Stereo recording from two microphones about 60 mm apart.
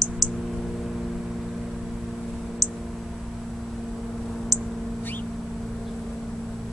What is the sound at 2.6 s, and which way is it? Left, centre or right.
Clicking, centre.